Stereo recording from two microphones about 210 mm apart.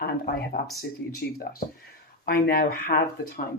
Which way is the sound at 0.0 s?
45° left (ahead or behind).